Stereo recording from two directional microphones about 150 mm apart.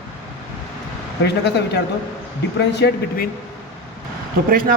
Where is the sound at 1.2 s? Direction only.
90° left.